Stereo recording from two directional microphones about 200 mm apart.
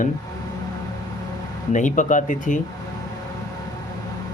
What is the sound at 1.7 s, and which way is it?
Speech, 40° left (ahead or behind).